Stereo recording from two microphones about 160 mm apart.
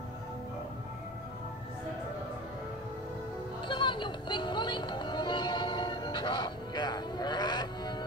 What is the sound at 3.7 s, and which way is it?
Music, 30° left (ahead or behind).